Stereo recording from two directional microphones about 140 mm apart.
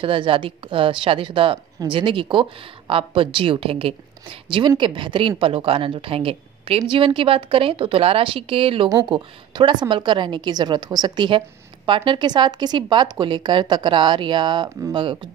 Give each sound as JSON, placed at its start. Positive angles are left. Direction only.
{"t": 0.0, "sound": "a woman's voice", "side_deg": -35}